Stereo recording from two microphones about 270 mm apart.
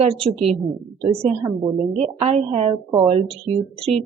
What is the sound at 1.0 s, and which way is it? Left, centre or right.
A woman's voice, right.